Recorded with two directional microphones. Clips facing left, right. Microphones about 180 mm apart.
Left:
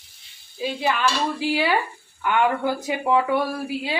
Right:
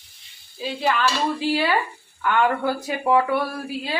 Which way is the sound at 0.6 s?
15° left (ahead or behind).